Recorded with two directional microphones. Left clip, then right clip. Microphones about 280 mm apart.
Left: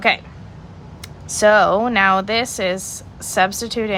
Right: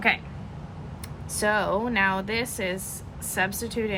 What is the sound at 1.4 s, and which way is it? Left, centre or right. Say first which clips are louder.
A woman's voice: left 11 dB; left.